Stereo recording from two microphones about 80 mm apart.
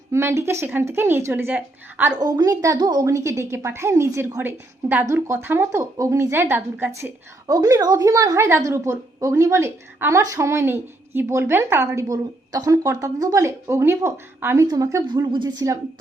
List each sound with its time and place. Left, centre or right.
0.1 s speech: right
2.1 s a woman's voice: right
2.7 s speech: right
3.1 s a woman's voice: right
6.9 s a woman's voice: right
12.0 s a woman's voice: right
14.7 s a woman's voice: right
15.0 s speech: right